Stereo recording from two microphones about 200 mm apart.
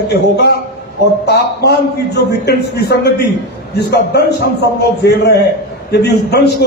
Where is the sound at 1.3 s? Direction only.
55° left (ahead or behind).